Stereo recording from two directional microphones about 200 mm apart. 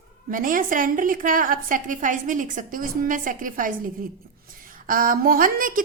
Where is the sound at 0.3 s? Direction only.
45° right (ahead or behind).